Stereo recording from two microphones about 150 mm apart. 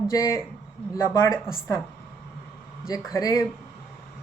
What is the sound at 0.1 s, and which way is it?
Speech, 20° left (ahead or behind).